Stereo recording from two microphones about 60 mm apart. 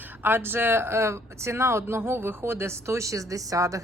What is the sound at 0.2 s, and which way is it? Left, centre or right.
Speech, right.